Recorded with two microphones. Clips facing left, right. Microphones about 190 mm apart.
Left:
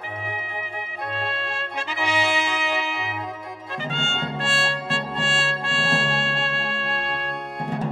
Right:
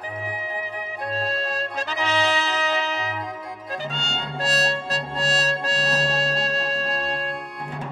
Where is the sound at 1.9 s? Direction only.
10° left (ahead or behind).